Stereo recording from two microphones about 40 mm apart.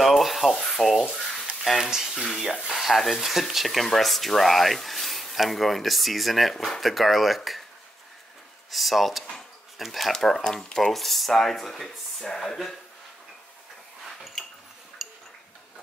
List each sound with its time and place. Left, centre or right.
0.0 s speech: centre
1.8 s speech: centre
2.4 s speech: centre
8.6 s speech: centre
10.4 s speech: centre
10.8 s speech: centre
14.0 s a sound: centre
15.0 s tick-tock: centre